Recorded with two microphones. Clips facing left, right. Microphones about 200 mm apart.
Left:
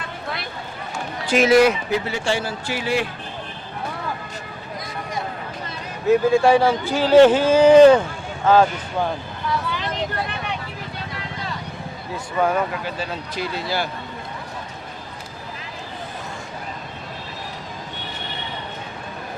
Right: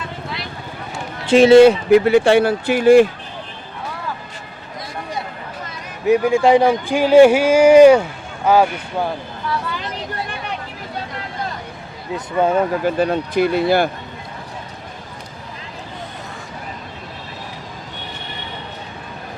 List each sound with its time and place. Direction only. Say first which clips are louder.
1.3 s speech: right 7 dB; 25° right (ahead or behind)
1.9 s speech: right 12 dB; 60° right (ahead or behind)
6.1 s speech: right 2 dB; 15° right (ahead or behind)
12.1 s speech: right 4 dB; 20° right (ahead or behind)
12.8 s speech: right 11 dB; 55° right (ahead or behind)